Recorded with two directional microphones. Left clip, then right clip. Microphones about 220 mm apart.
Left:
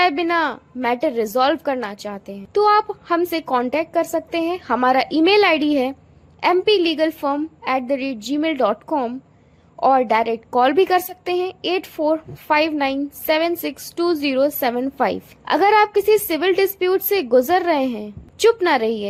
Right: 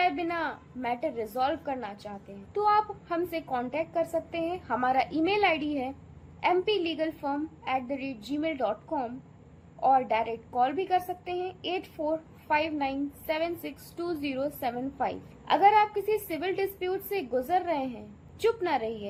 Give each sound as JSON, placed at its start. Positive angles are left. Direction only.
{"t": 0.0, "sound": "a woman's voice", "side_deg": 45}